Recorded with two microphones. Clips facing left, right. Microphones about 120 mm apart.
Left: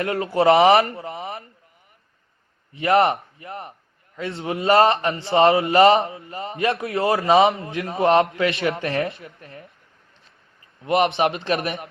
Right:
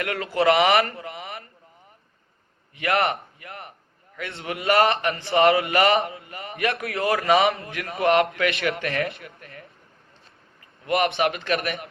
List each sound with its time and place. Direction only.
0.0 s a man's voice: 25° left (ahead or behind)
2.7 s a man's voice: 30° left (ahead or behind)
10.8 s a man's voice: 30° left (ahead or behind)